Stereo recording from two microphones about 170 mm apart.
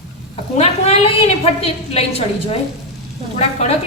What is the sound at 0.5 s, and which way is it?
A woman's voice, 35° left (ahead or behind).